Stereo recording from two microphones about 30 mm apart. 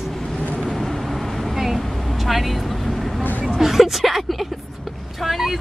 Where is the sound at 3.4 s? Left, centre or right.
Centre.